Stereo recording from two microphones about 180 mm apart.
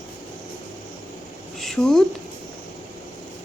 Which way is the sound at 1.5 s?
Centre (ahead or behind).